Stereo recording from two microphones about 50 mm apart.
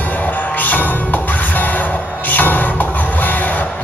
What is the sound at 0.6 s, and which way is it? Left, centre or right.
Music, left.